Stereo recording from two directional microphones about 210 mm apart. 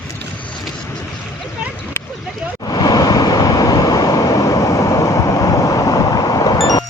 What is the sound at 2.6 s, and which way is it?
Vehicle, 20° left (ahead or behind).